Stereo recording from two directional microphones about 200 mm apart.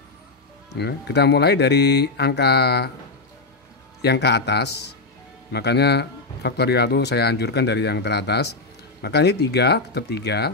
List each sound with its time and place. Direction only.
0.7 s speech: 55° left (ahead or behind)
4.0 s speech: 55° left (ahead or behind)